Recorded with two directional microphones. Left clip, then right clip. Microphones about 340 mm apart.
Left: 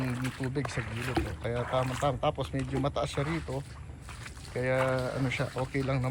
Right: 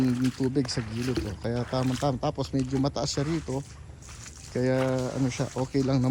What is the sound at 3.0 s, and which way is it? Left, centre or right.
Speech, right.